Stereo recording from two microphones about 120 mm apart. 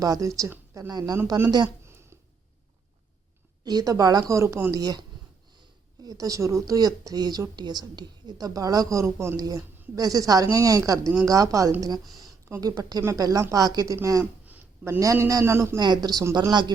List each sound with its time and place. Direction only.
0.0 s a woman's voice: 30° right (ahead or behind)
3.6 s a woman's voice: 35° right (ahead or behind)
14.4 s a sound: 15° right (ahead or behind)
14.9 s a woman's voice: 25° right (ahead or behind)
15.8 s speech: 35° right (ahead or behind)